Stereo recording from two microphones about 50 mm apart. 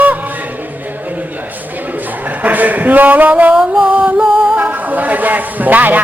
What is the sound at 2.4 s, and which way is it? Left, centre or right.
Speech, right.